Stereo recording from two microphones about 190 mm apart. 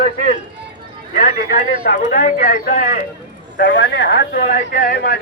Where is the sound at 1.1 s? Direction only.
45° left (ahead or behind).